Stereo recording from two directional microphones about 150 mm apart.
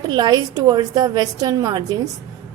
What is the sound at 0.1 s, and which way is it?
A woman's voice, 25° right (ahead or behind).